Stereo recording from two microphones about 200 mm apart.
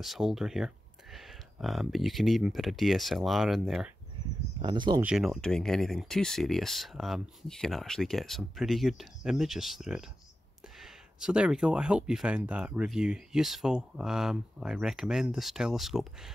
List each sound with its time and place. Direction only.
0.0 s speech: centre (ahead or behind)
4.6 s speech: 25° right (ahead or behind)
5.0 s speech: centre (ahead or behind)